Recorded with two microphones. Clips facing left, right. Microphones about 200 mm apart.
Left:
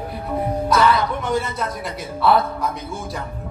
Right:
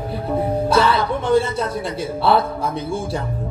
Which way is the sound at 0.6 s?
30° right (ahead or behind).